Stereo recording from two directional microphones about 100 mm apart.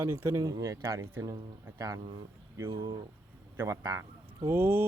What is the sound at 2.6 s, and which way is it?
Speech, 50° right (ahead or behind).